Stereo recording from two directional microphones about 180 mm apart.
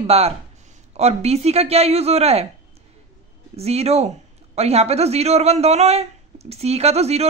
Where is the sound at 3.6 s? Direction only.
35° right (ahead or behind).